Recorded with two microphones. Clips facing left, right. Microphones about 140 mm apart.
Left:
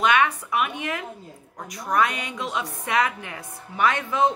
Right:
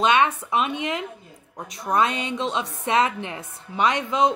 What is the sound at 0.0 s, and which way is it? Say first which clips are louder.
A woman's voice: right 1 dB; 25° right (ahead or behind).